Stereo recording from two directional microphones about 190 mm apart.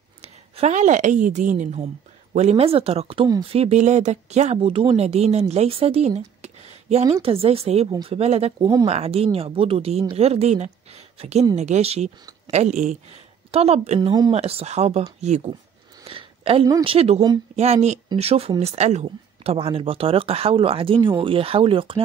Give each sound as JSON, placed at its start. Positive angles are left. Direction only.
{"t": 0.2, "sound": "a woman's voice", "side_deg": -35}
{"t": 3.5, "sound": "speech", "side_deg": -35}
{"t": 8.5, "sound": "speech", "side_deg": -20}
{"t": 8.8, "sound": "a woman's voice", "side_deg": -30}
{"t": 16.1, "sound": "a sound", "side_deg": -30}
{"t": 16.8, "sound": "speech", "side_deg": -30}